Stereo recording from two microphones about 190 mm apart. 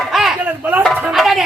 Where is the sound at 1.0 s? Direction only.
5° right (ahead or behind).